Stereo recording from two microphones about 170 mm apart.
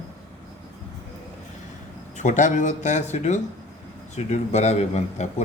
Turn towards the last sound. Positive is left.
turn(degrees=40)  # may be behind; listen again after turning